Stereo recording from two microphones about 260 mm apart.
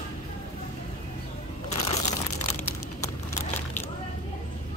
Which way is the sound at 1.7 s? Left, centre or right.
Left.